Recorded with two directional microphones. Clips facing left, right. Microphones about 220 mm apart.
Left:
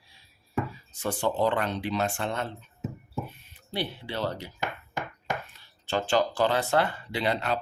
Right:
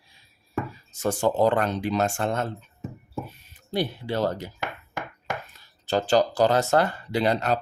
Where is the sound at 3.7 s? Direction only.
45° right (ahead or behind).